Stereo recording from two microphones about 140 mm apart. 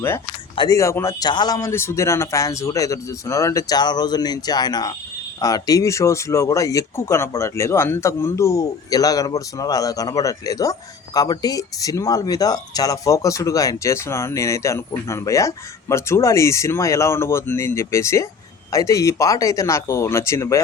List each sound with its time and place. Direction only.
0.7 s speech: 20° left (ahead or behind)